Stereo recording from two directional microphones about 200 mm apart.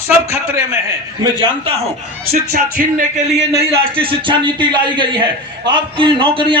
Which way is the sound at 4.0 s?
25° right (ahead or behind).